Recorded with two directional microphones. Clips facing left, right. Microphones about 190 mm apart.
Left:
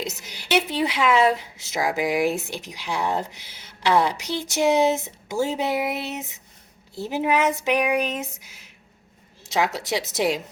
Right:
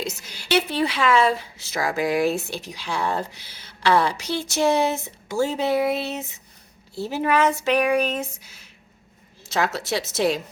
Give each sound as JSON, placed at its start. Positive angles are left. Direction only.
{"t": 0.0, "sound": "a woman's voice", "side_deg": 20}